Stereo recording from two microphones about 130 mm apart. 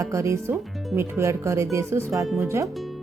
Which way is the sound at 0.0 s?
25° right (ahead or behind).